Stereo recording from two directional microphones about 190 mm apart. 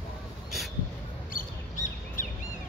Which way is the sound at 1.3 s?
45° left (ahead or behind).